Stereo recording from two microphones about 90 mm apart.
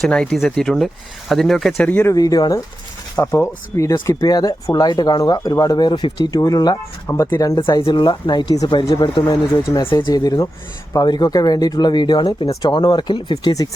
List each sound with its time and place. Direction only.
0.0 s speech: 10° left (ahead or behind)
1.9 s speech: 25° left (ahead or behind)
2.1 s speech: 45° left (ahead or behind)
3.2 s speech: 30° left (ahead or behind)
4.3 s speech: 45° left (ahead or behind)
6.3 s speech: 40° left (ahead or behind)
7.8 s speech: 75° left (ahead or behind); by 13.7 s 50° left (ahead or behind)